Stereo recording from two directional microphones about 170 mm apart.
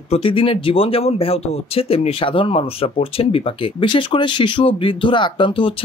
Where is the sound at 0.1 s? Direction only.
30° left (ahead or behind).